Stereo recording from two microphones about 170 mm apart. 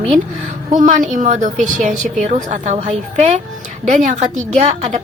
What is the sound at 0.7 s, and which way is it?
A woman's voice, 50° right (ahead or behind).